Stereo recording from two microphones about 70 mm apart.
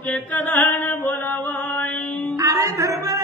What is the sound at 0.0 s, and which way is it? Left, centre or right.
Chant, left.